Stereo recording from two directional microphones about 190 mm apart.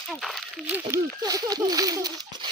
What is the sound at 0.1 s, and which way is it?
Speech, centre (ahead or behind).